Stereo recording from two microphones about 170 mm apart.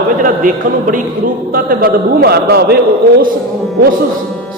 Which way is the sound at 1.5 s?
60° right (ahead or behind).